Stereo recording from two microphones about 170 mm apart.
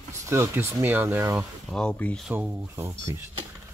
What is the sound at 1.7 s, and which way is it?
Speech, 5° left (ahead or behind).